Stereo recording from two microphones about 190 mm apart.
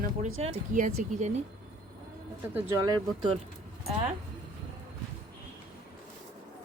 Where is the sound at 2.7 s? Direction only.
20° right (ahead or behind).